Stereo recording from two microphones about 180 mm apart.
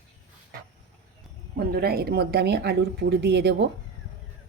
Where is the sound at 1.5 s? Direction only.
60° right (ahead or behind).